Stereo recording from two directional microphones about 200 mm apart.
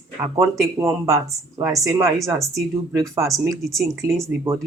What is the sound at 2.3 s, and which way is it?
Speech, 15° right (ahead or behind).